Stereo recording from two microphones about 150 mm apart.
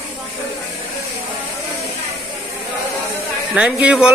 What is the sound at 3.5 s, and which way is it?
Speech, 5° right (ahead or behind).